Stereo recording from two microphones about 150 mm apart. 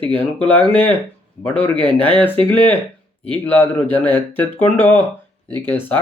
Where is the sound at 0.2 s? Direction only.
10° left (ahead or behind).